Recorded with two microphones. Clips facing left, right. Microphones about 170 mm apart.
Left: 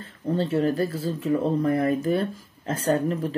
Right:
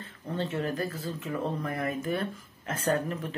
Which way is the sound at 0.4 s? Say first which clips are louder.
Left 7 dB; 40° left (ahead or behind).